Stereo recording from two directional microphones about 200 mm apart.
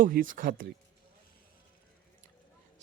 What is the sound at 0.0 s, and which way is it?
Speech, 45° right (ahead or behind).